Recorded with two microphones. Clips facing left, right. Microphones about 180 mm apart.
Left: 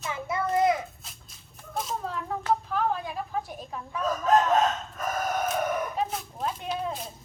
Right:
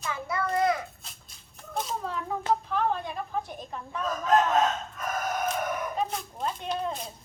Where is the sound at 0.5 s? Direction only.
20° left (ahead or behind).